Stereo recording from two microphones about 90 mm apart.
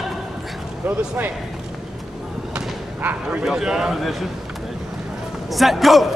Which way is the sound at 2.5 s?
20° right (ahead or behind).